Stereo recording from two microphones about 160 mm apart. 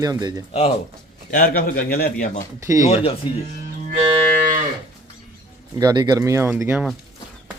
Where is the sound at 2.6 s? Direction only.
20° right (ahead or behind).